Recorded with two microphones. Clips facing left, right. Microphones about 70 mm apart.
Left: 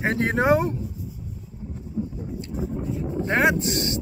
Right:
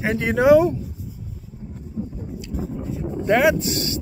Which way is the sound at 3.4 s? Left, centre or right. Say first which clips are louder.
Right 2 dB; left.